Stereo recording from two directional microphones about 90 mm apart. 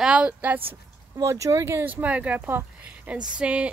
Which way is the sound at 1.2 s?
35° right (ahead or behind).